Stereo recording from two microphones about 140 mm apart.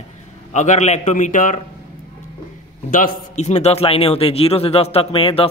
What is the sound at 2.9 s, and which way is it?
A man's voice, 75° left (ahead or behind).